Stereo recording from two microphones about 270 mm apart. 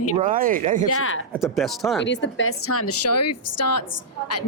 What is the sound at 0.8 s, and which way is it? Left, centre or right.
Speech, left.